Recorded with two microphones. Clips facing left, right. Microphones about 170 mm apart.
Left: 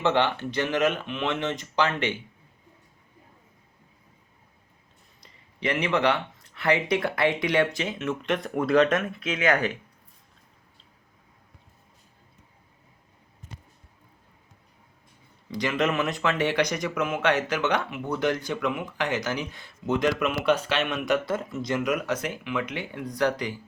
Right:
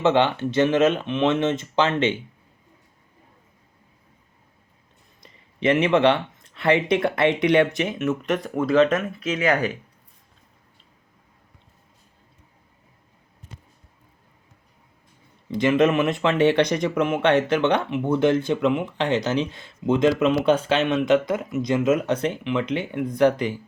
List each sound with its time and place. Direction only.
0.0 s speech: 20° right (ahead or behind)
5.2 s speech: 20° right (ahead or behind)
8.4 s speech: centre (ahead or behind)
8.8 s speech: 30° right (ahead or behind)
15.4 s speech: 20° right (ahead or behind)